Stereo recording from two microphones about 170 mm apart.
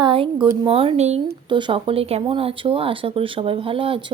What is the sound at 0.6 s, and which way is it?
Speech, 35° right (ahead or behind).